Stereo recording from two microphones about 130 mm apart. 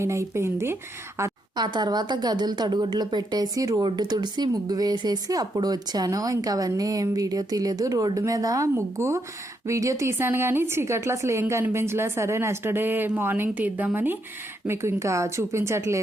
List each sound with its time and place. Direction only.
0.0 s a woman's voice: 20° right (ahead or behind)
1.5 s a woman's voice: 35° right (ahead or behind)